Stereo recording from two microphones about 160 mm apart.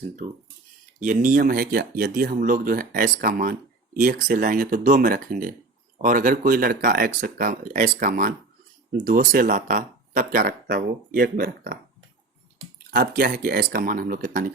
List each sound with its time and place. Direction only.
1.0 s speech: 55° right (ahead or behind); by 11.8 s 70° right (ahead or behind)
12.9 s speech: 70° right (ahead or behind)